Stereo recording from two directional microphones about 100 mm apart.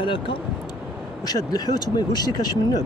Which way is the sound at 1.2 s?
40° left (ahead or behind).